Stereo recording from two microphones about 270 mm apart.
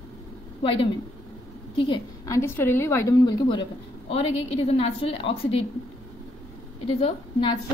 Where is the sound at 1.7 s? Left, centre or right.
Centre.